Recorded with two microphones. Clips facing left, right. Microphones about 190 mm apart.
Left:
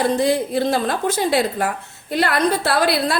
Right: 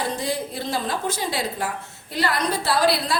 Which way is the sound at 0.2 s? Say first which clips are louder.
Left 9 dB; 65° left (ahead or behind).